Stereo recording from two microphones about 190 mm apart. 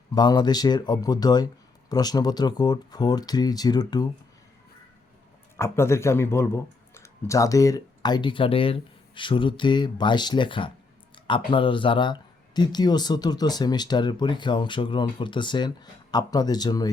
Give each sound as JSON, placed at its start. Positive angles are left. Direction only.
{"t": 0.1, "sound": "speech", "side_deg": 20}
{"t": 5.5, "sound": "speech", "side_deg": 15}